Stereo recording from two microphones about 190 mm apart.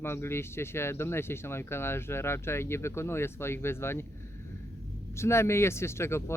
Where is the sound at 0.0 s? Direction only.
15° left (ahead or behind).